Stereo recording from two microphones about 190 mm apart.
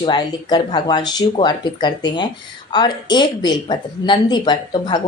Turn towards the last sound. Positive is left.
turn(degrees=25)  # may be behind; listen again after turning